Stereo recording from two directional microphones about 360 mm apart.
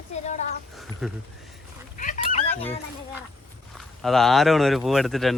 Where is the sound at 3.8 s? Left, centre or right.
Centre.